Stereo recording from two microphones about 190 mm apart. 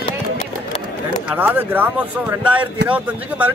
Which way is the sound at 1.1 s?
10° right (ahead or behind).